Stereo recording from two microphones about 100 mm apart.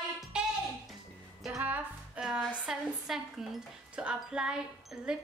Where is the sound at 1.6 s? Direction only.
15° right (ahead or behind).